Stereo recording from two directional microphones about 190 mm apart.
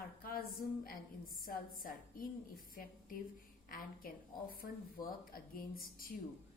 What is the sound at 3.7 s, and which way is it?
A woman's voice, 50° left (ahead or behind).